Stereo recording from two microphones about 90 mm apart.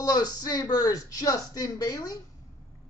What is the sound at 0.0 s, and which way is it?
Speech, 45° left (ahead or behind).